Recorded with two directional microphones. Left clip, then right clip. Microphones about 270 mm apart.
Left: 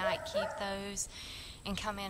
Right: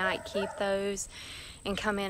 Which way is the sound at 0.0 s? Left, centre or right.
Left.